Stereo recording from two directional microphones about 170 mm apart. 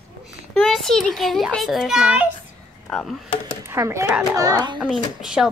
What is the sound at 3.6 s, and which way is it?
A child's voice, 15° right (ahead or behind).